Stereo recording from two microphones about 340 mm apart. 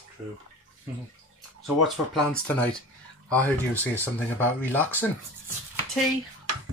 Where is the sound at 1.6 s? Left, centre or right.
Centre.